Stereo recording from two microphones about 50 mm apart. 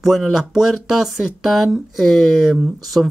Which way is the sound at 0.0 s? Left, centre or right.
Centre.